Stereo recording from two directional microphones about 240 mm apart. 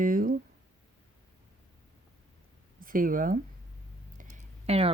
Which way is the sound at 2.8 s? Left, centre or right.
Right.